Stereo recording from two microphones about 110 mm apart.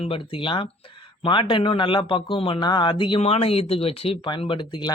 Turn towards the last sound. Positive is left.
turn(degrees=45)  # may be behind; listen again after turning